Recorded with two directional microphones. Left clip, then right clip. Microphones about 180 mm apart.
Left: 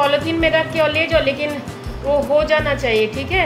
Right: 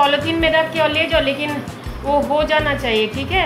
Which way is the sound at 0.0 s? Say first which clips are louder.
Right 1 dB; centre (ahead or behind).